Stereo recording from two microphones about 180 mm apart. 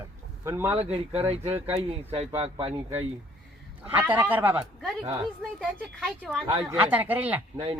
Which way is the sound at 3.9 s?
10° right (ahead or behind).